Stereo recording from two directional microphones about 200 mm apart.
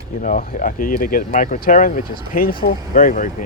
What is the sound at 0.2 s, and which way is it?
Speech, 40° left (ahead or behind).